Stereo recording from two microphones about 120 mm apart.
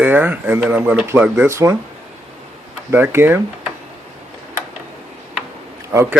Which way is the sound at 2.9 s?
20° right (ahead or behind).